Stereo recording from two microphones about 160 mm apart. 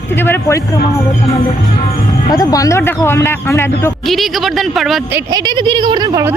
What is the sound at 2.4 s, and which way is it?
Speech, 20° left (ahead or behind).